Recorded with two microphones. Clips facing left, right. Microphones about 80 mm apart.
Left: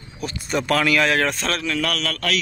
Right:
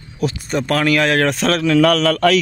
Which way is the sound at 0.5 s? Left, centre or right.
Right.